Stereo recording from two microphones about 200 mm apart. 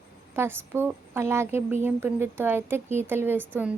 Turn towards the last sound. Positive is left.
turn(degrees=-10)  # may be behind; listen again after turning